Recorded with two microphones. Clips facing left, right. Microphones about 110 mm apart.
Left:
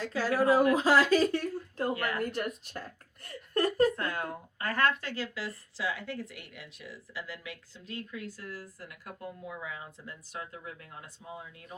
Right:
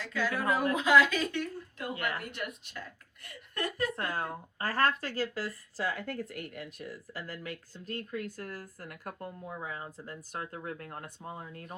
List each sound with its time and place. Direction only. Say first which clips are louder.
0.0 s speech: left 5 dB; 35° left (ahead or behind)
3.9 s speech: even; 30° right (ahead or behind); by 11.7 s 50° right (ahead or behind)